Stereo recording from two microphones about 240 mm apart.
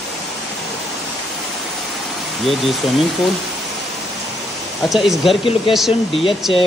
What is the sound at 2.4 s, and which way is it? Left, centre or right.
Speech, centre.